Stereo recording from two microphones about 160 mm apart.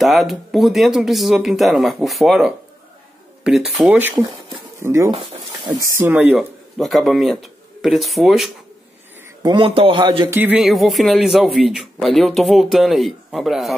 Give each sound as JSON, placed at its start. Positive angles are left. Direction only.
{"t": 0.0, "sound": "speech", "side_deg": 0}
{"t": 9.4, "sound": "speech", "side_deg": -30}
{"t": 10.3, "sound": "speech", "side_deg": -10}
{"t": 10.6, "sound": "speech", "side_deg": 0}